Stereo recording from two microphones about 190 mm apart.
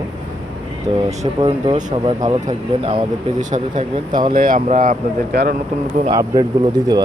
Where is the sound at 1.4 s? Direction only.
25° right (ahead or behind).